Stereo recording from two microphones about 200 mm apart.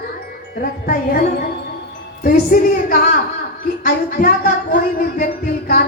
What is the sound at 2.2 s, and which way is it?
Speech, 45° left (ahead or behind).